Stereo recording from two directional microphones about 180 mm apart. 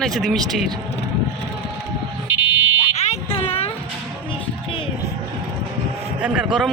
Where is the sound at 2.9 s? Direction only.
40° left (ahead or behind).